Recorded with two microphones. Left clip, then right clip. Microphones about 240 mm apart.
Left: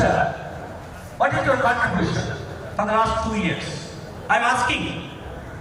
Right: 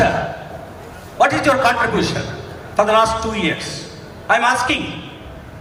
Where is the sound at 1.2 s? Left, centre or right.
Right.